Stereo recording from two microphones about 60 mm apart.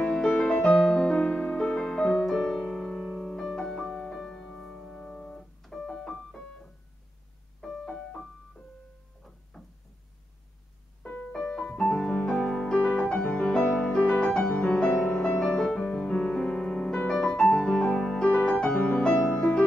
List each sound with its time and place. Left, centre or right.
0.0 s music: centre
5.6 s keyboard: centre
7.6 s music: centre
9.5 s knock: centre
11.0 s music: left